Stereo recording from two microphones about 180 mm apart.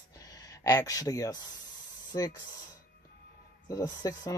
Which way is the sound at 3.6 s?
20° left (ahead or behind).